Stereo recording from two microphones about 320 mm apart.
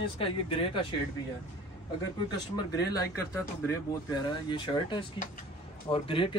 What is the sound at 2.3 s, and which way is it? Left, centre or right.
Speech, centre.